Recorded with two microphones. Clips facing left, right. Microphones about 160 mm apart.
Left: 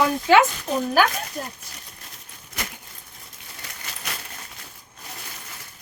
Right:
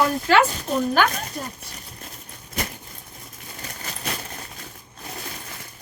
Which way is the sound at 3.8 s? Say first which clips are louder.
Right 5 dB; 35° right (ahead or behind).